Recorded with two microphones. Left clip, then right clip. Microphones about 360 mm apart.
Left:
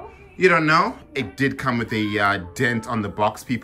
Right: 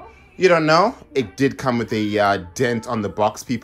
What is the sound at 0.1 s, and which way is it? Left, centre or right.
Speech, centre.